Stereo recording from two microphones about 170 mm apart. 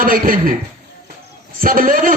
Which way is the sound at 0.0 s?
55° right (ahead or behind).